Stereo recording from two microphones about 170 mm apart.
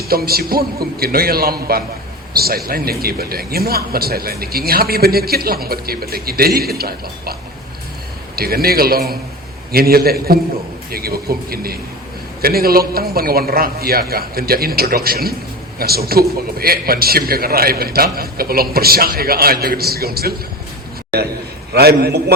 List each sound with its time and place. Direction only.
0.1 s a man's voice: 65° right (ahead or behind)
8.4 s a man's voice: 65° right (ahead or behind)
21.7 s a man's voice: 70° right (ahead or behind)